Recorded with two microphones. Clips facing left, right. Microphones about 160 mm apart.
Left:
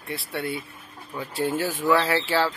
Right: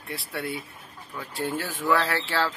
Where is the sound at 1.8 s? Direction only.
20° left (ahead or behind).